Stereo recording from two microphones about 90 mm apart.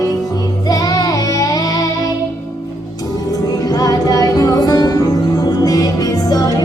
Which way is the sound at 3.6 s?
45° left (ahead or behind).